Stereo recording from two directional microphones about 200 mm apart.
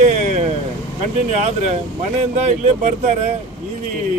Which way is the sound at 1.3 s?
35° right (ahead or behind).